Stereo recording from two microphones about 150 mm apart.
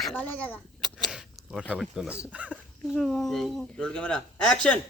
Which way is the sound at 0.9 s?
Centre (ahead or behind).